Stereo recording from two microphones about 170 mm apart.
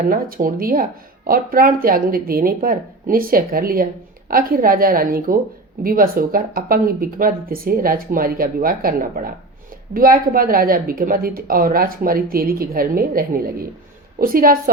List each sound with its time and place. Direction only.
0.1 s a woman's voice: 55° right (ahead or behind)